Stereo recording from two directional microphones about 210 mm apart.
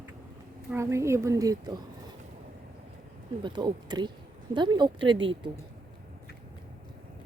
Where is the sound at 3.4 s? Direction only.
20° right (ahead or behind).